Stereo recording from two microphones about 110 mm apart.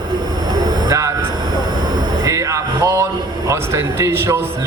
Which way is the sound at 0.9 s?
30° right (ahead or behind).